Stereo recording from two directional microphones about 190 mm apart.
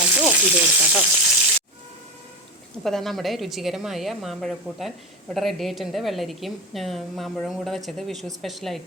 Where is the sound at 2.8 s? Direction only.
Centre (ahead or behind).